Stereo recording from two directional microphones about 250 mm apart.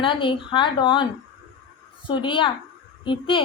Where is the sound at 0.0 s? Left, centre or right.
Centre.